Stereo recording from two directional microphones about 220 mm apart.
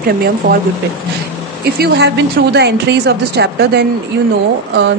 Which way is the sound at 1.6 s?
45° right (ahead or behind).